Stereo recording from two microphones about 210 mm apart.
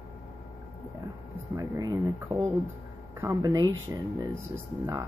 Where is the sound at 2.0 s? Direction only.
10° right (ahead or behind).